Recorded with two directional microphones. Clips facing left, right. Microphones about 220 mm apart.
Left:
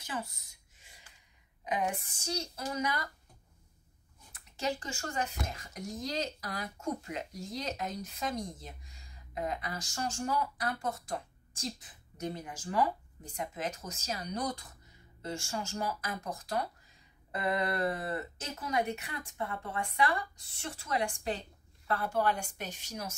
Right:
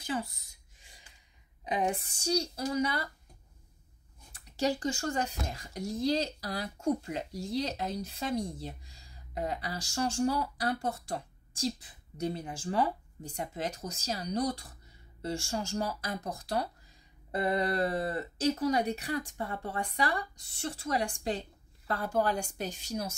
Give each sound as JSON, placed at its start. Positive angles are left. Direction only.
{"t": 0.0, "sound": "speech", "side_deg": -30}
{"t": 1.7, "sound": "speech", "side_deg": -35}
{"t": 4.3, "sound": "speech", "side_deg": -35}